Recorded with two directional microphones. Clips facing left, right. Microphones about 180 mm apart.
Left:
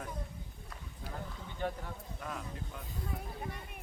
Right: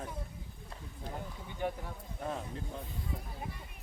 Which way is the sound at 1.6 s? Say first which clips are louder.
Right 1 dB; 10° right (ahead or behind).